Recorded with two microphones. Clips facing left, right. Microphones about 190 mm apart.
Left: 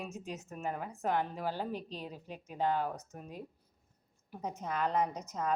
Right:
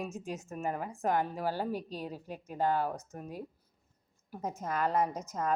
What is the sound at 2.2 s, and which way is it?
Speech, 45° right (ahead or behind).